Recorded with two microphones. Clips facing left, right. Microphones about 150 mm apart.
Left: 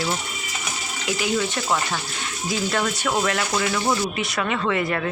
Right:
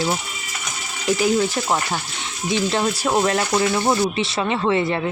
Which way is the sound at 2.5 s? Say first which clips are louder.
Right 4 dB; 25° right (ahead or behind).